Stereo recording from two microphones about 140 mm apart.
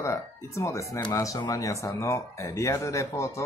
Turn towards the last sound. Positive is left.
turn(degrees=20)  # may be behind; listen again after turning